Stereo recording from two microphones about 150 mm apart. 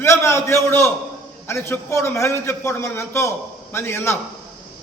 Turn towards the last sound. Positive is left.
turn(degrees=15)  # may be behind; listen again after turning